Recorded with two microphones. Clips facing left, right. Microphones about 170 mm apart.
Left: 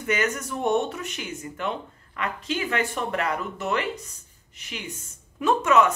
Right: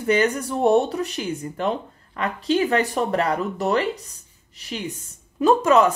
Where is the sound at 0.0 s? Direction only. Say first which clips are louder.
Right 6 dB; 30° right (ahead or behind).